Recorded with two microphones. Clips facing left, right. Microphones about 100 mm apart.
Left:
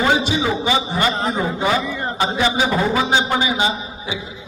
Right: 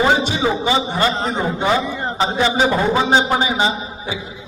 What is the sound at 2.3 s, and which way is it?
A man's voice, 30° right (ahead or behind).